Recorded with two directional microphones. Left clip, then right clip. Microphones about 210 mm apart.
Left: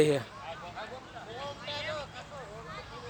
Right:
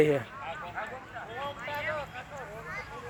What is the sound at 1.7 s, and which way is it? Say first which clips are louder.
Vehicle: right 2 dB; 25° right (ahead or behind).